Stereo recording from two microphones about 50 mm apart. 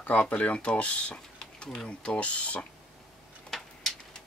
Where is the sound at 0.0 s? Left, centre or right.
Left.